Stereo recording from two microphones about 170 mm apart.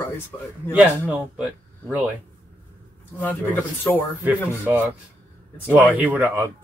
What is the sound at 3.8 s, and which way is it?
Speech, 10° left (ahead or behind).